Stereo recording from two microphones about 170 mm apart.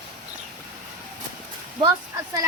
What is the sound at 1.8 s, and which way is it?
Speech, 20° right (ahead or behind).